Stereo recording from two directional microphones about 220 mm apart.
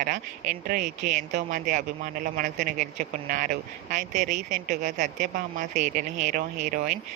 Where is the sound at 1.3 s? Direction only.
40° right (ahead or behind).